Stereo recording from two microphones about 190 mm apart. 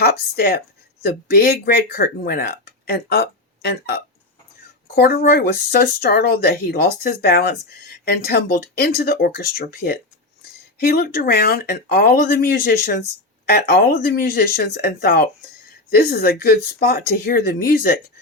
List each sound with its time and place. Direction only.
0.0 s speech: 55° left (ahead or behind)
4.9 s speech: 50° left (ahead or behind)